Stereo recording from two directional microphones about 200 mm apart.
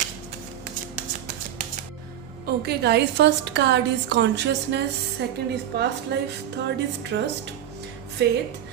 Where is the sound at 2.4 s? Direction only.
55° right (ahead or behind).